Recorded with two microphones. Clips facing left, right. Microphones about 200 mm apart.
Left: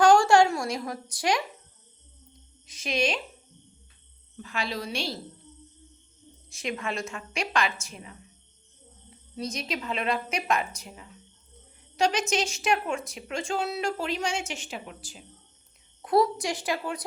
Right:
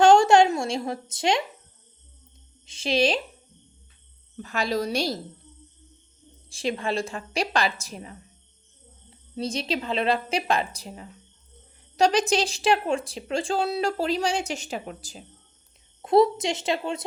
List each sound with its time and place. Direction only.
0.0 s a sound: 25° right (ahead or behind)
2.6 s speech: 30° right (ahead or behind)
4.4 s speech: 45° right (ahead or behind)
6.5 s speech: 30° right (ahead or behind)
16.0 s a woman's voice: 25° right (ahead or behind)